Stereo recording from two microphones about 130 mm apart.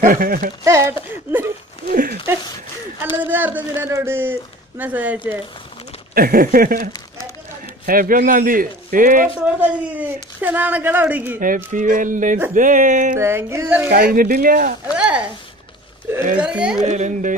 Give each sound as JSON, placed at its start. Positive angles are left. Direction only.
{"t": 0.0, "sound": "speech", "side_deg": -90}
{"t": 0.7, "sound": "speech", "side_deg": -20}
{"t": 1.9, "sound": "a sound", "side_deg": -90}
{"t": 3.2, "sound": "a man's voice", "side_deg": -15}
{"t": 6.3, "sound": "speech", "side_deg": -90}
{"t": 9.4, "sound": "a man's voice", "side_deg": -10}
{"t": 11.3, "sound": "speech", "side_deg": -90}
{"t": 13.2, "sound": "speech", "side_deg": -20}
{"t": 13.9, "sound": "speech", "side_deg": -90}
{"t": 15.0, "sound": "a sound", "side_deg": -10}
{"t": 16.3, "sound": "a man's voice", "side_deg": -10}
{"t": 16.8, "sound": "speech", "side_deg": -65}